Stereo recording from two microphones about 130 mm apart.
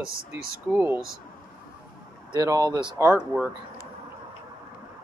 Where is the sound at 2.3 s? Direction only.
30° right (ahead or behind).